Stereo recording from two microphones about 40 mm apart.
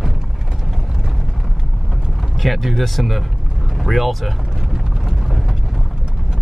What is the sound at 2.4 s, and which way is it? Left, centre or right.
Speech, centre.